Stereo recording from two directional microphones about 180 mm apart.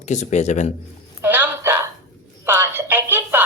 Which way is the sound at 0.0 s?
40° left (ahead or behind).